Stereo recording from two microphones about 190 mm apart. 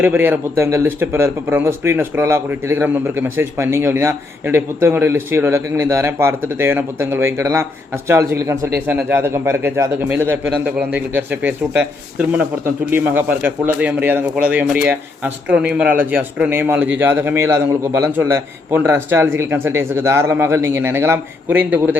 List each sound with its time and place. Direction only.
0.0 s speech: 10° right (ahead or behind)